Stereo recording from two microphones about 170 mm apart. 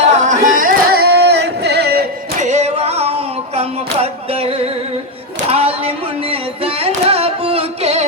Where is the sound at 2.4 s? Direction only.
45° right (ahead or behind).